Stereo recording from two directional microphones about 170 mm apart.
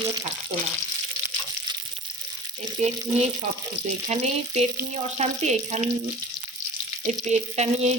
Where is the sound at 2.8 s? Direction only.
40° right (ahead or behind).